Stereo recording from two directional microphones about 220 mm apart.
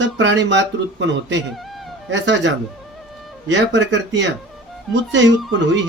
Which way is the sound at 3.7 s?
55° right (ahead or behind).